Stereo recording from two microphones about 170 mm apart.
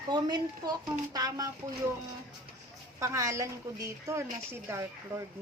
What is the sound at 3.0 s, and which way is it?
A woman's voice, 20° right (ahead or behind).